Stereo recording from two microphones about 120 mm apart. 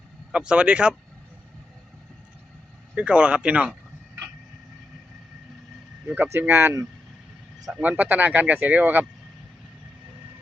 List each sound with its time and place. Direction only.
0.3 s speech: 10° right (ahead or behind)
2.9 s speech: 10° right (ahead or behind)
6.4 s speech: 15° right (ahead or behind)